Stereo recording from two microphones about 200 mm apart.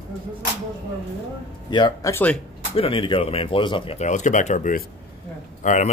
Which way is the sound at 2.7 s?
25° left (ahead or behind).